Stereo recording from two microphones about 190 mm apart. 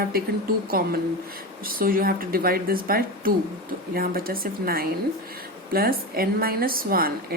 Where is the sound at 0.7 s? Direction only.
50° right (ahead or behind).